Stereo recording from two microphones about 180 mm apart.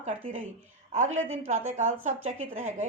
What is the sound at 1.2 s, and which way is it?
Speech, 90° right.